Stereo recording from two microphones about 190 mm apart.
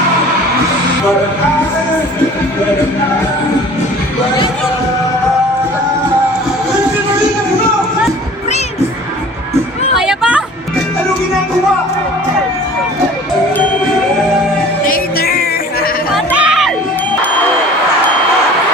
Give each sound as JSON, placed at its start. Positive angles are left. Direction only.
{"t": 10.0, "sound": "a sound", "side_deg": -5}
{"t": 14.8, "sound": "music", "side_deg": 50}
{"t": 16.1, "sound": "music", "side_deg": -5}